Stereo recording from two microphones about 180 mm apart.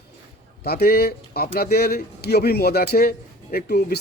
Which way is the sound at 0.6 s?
60° left (ahead or behind).